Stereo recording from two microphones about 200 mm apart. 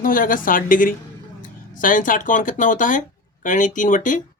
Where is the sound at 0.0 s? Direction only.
45° left (ahead or behind).